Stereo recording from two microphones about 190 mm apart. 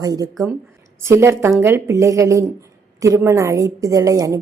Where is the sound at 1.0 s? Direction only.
15° right (ahead or behind).